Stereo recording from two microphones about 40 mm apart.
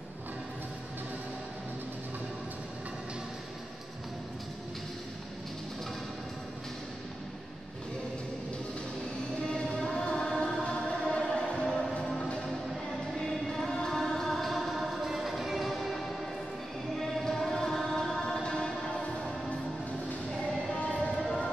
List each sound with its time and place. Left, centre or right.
9.5 s music: centre
11.6 s music: centre
13.7 s music: centre
17.2 s music: centre
18.2 s music: centre
20.7 s music: left